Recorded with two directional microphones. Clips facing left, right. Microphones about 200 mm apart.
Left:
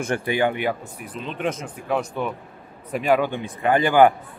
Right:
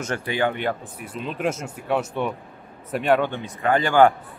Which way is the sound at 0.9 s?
Centre (ahead or behind).